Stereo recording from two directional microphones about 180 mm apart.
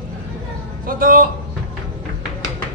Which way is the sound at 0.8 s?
50° right (ahead or behind).